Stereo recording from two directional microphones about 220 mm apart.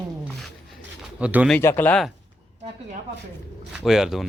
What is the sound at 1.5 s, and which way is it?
Speech, 10° left (ahead or behind).